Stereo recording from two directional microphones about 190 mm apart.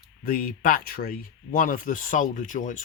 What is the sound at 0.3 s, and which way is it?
Speech, 45° left (ahead or behind).